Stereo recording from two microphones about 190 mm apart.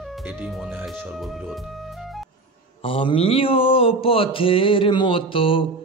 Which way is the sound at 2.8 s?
30° left (ahead or behind).